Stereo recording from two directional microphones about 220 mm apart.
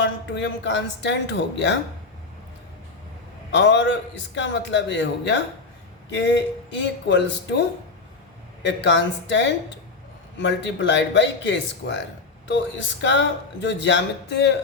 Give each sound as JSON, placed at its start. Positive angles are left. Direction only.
{"t": 0.0, "sound": "speech", "side_deg": 55}
{"t": 3.5, "sound": "speech", "side_deg": 55}
{"t": 8.6, "sound": "speech", "side_deg": 55}